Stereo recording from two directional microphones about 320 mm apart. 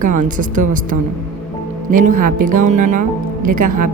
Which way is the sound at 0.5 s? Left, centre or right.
Right.